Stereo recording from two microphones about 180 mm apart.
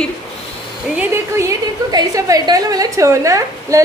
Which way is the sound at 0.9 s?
15° right (ahead or behind).